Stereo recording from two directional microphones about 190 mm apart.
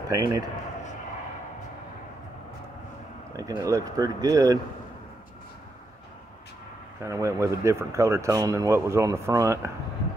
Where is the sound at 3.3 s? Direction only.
20° right (ahead or behind).